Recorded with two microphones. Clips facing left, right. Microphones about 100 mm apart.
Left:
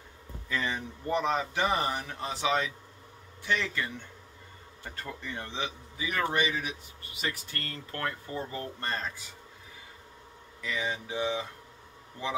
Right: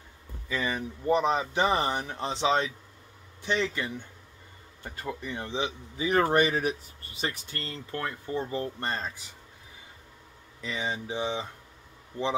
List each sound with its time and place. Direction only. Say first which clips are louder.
0.5 s speech: right 2 dB; 10° right (ahead or behind)
5.9 s speech: right 6 dB; 35° right (ahead or behind)
7.2 s speech: right 2 dB; 25° right (ahead or behind)
10.6 s speech: right 1 dB; 25° right (ahead or behind)